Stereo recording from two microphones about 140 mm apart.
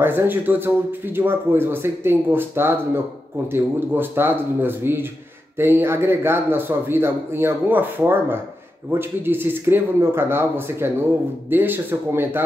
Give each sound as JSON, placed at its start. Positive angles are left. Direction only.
{"t": 0.0, "sound": "speech", "side_deg": -15}